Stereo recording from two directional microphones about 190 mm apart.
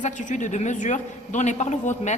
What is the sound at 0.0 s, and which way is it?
A woman's voice, 40° left (ahead or behind).